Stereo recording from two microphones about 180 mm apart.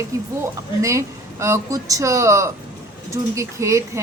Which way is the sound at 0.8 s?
15° right (ahead or behind).